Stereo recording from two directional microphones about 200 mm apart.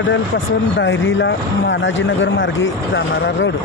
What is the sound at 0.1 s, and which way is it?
Speech, 70° left (ahead or behind).